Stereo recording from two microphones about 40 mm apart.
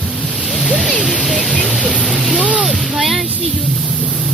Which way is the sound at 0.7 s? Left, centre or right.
Left.